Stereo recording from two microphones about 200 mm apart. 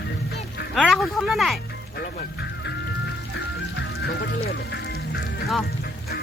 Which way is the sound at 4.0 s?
55° left (ahead or behind).